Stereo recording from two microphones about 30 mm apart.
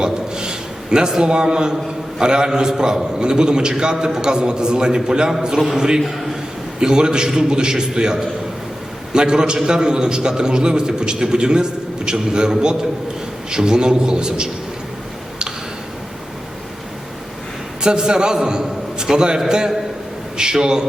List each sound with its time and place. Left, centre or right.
0.0 s a sound: right
2.1 s a man's voice: right
5.5 s a man's voice: centre
6.7 s a man's voice: right
17.8 s a man's voice: right